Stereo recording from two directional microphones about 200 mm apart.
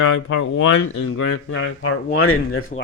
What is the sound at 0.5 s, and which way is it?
Speech, 85° left.